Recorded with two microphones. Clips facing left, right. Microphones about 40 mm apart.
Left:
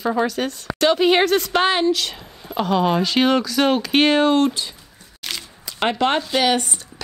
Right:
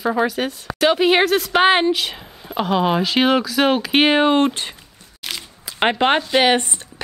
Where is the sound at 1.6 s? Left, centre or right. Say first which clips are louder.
Right 5 dB; right.